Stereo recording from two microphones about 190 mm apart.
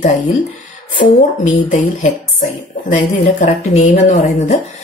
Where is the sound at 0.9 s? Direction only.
45° left (ahead or behind).